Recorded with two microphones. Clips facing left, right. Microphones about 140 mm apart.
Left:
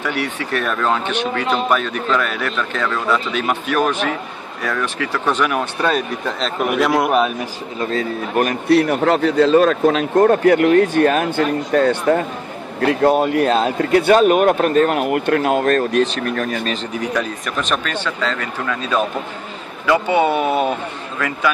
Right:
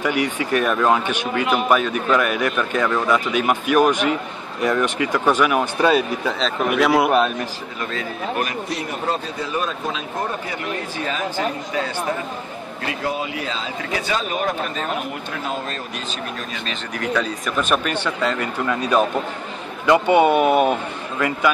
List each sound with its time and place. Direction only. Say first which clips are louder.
0.0 s a man's voice: right 2 dB; 15° right (ahead or behind); by 7.3 s 5° left (ahead or behind)
7.9 s a man's voice: left 6 dB; 40° left (ahead or behind)
8.6 s speech: left 11 dB; 65° left (ahead or behind)
17.1 s speech: even; 5° left (ahead or behind)
17.6 s speech: right 1 dB; 10° right (ahead or behind)